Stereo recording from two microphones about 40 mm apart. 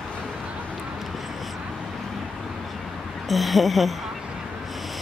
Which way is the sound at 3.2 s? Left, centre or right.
Centre.